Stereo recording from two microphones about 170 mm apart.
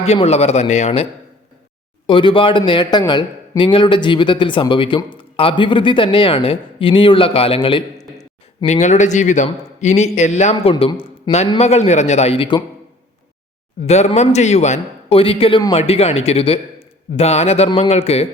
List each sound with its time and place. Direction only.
0.0 s a man's voice: 40° left (ahead or behind)
2.0 s speech: 30° left (ahead or behind)
8.6 s a man's voice: 40° left (ahead or behind)
13.8 s a man's voice: 40° left (ahead or behind)